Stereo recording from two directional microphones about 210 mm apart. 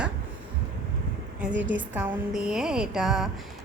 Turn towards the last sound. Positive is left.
turn(degrees=0)  # may be behind; listen again after turning